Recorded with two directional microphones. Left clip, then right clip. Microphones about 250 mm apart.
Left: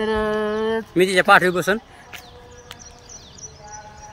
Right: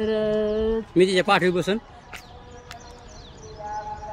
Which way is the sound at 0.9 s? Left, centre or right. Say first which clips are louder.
Left 5 dB; centre.